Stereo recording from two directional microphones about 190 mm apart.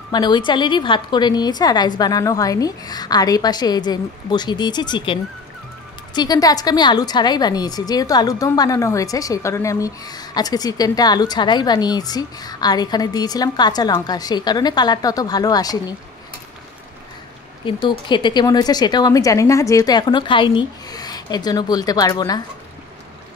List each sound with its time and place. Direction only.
0.1 s a woman's voice: 25° left (ahead or behind)
17.6 s a woman's voice: 25° left (ahead or behind)